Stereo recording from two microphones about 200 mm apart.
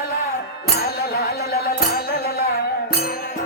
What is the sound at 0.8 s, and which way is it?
Music, 50° left (ahead or behind).